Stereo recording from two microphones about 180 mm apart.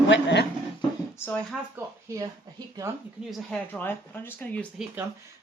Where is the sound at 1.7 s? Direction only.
15° right (ahead or behind).